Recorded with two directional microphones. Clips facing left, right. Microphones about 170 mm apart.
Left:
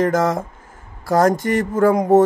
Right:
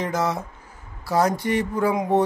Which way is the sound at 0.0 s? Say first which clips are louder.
Left 7 dB; 50° left (ahead or behind).